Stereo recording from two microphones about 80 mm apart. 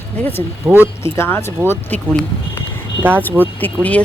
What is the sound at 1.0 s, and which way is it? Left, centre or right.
Speech, left.